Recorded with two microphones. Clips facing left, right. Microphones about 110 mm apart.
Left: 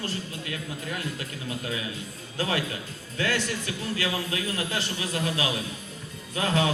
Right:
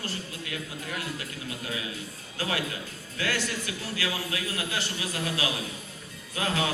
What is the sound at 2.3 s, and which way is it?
Speech, 35° left (ahead or behind).